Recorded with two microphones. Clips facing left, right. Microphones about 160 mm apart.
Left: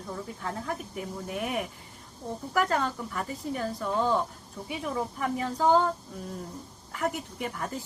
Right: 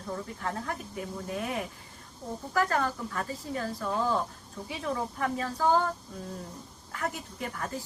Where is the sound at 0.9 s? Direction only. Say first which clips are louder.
Even; 20° left (ahead or behind).